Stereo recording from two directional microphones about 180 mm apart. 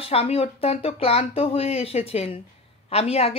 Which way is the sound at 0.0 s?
35° left (ahead or behind).